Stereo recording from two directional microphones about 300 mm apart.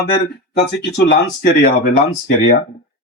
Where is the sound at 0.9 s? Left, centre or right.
Left.